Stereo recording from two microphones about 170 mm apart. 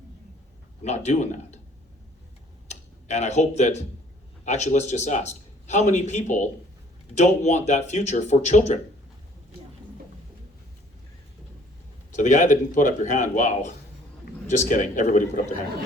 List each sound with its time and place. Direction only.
0.8 s a man's voice: 40° left (ahead or behind)
2.6 s a man's voice: 40° left (ahead or behind)
12.1 s a man's voice: 45° left (ahead or behind)